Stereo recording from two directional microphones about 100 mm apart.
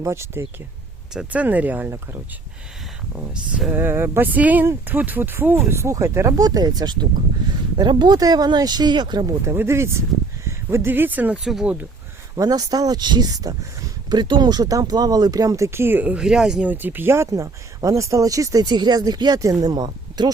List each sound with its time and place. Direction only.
0.0 s speech: 25° right (ahead or behind)
1.1 s speech: 10° right (ahead or behind)
3.2 s speech: 10° right (ahead or behind)
3.7 s speech: 25° right (ahead or behind); by 9.2 s 50° right (ahead or behind)
9.2 s speech: 30° right (ahead or behind); by 11.9 s 10° right (ahead or behind)
12.4 s speech: 40° right (ahead or behind); by 16.2 s 15° right (ahead or behind)
16.2 s speech: 5° right (ahead or behind)
16.7 s speech: 20° right (ahead or behind)
18.6 s speech: 45° right (ahead or behind)